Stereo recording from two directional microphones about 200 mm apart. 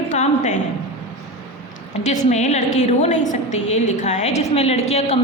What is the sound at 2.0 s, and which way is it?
A woman's voice, 35° left (ahead or behind).